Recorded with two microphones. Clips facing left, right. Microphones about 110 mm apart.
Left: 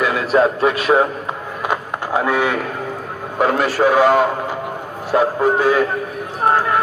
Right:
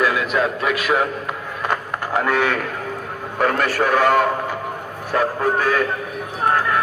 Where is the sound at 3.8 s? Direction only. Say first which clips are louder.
Left 4 dB; 15° left (ahead or behind).